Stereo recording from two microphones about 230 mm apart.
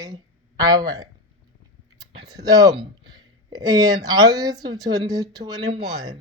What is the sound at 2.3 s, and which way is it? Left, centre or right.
Speech, centre.